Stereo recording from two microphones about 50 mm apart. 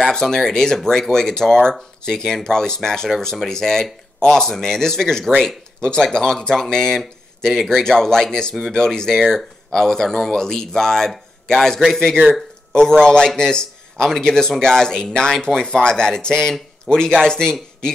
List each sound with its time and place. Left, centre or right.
0.0 s speech: centre